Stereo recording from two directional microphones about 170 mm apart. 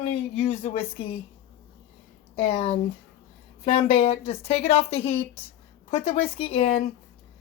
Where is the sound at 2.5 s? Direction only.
40° left (ahead or behind).